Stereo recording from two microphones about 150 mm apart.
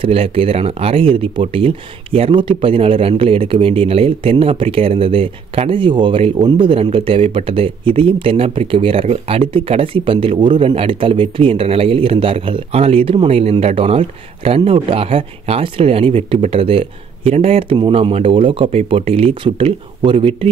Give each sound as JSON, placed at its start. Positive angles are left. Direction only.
{"t": 0.0, "sound": "speech", "side_deg": -40}